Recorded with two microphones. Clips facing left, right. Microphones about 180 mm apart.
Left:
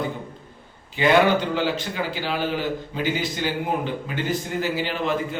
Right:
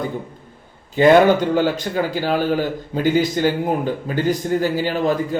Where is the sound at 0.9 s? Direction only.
45° right (ahead or behind).